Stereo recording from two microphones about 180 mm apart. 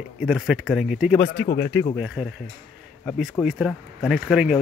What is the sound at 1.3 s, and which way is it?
Speech, 70° left (ahead or behind).